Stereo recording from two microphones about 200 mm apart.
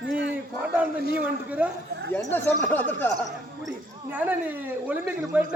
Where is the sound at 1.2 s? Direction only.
5° right (ahead or behind).